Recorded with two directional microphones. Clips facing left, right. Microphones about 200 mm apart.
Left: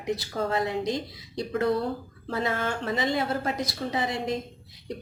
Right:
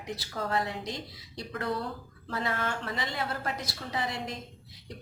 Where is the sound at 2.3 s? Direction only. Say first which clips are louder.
Left 4 dB; 25° left (ahead or behind).